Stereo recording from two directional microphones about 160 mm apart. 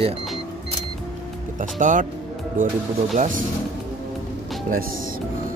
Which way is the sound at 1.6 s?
55° right (ahead or behind).